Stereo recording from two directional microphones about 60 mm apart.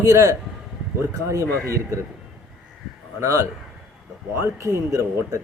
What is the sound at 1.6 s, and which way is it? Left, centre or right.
Speech, right.